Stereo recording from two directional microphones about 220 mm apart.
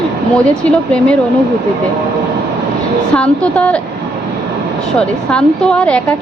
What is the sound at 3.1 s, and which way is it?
Speech, 5° left (ahead or behind).